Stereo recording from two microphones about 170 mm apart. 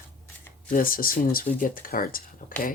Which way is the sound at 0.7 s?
55° left (ahead or behind).